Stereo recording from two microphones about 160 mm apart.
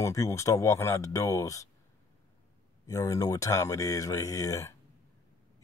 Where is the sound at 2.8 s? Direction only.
20° left (ahead or behind).